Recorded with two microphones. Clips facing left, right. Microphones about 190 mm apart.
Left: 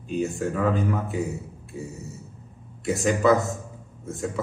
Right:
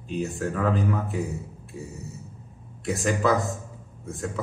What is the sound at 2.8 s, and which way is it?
A man's voice, centre (ahead or behind).